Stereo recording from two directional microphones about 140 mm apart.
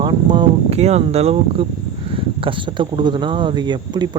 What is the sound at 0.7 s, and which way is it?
A man's voice, 50° right (ahead or behind).